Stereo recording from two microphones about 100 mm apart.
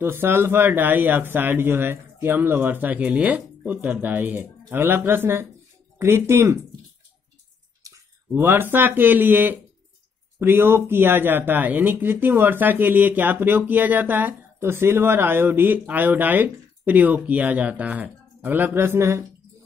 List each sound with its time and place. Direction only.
0.0 s speech: 20° right (ahead or behind)
7.8 s speech: 30° right (ahead or behind)